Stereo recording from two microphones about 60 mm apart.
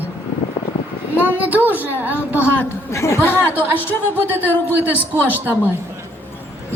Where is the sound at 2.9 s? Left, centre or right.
Left.